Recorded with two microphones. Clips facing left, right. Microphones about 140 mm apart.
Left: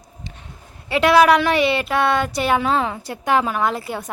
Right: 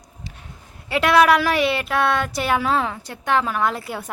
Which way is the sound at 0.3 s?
10° right (ahead or behind).